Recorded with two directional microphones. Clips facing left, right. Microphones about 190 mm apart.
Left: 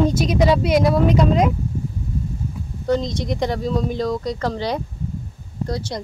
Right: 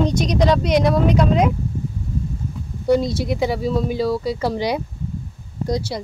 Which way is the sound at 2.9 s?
10° right (ahead or behind).